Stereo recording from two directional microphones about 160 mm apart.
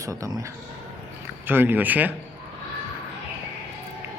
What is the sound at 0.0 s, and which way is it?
A man's voice, 20° right (ahead or behind).